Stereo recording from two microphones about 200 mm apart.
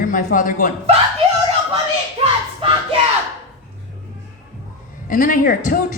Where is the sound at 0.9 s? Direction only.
30° right (ahead or behind).